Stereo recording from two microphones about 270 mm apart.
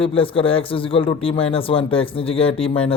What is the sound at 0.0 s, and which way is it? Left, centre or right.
Speech, centre.